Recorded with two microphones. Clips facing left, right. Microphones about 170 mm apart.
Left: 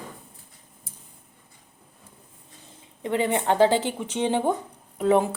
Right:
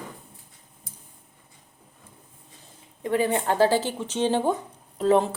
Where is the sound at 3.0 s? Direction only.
20° left (ahead or behind).